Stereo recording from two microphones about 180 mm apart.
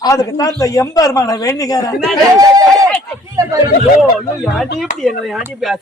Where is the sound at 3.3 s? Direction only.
20° right (ahead or behind).